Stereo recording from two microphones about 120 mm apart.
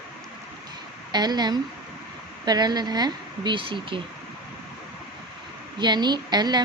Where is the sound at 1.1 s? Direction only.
35° right (ahead or behind).